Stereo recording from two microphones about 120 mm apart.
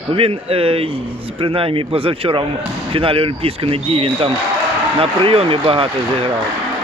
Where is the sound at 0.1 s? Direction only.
50° right (ahead or behind).